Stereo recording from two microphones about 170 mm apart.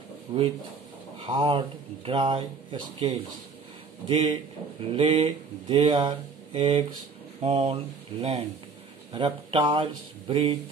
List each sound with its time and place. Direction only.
0.3 s speech: 35° right (ahead or behind)